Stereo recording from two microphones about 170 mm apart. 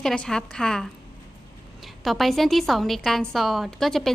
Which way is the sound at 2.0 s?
Centre (ahead or behind).